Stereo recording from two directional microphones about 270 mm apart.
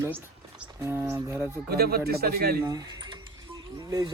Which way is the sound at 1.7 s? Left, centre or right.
Right.